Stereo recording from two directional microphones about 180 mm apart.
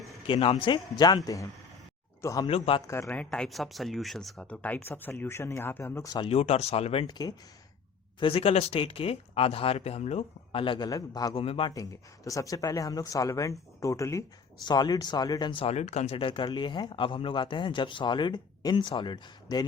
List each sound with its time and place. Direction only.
0.3 s speech: 30° left (ahead or behind)
2.5 s speech: 30° left (ahead or behind)
2.8 s speech: 15° left (ahead or behind)
3.2 s speech: 5° left (ahead or behind); by 6.2 s 20° left (ahead or behind)
6.2 s speech: 35° left (ahead or behind)
11.3 s speech: 30° left (ahead or behind)
11.7 s speech: 20° left (ahead or behind)